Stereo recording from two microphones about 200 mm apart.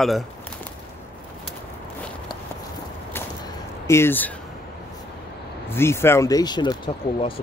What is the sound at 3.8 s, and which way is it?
Speech, 10° left (ahead or behind).